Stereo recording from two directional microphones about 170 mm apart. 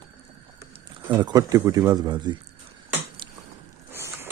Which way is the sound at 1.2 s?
20° right (ahead or behind).